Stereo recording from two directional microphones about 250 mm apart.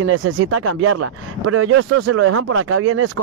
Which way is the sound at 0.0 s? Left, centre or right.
Right.